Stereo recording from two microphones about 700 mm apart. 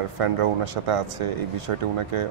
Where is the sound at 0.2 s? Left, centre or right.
Right.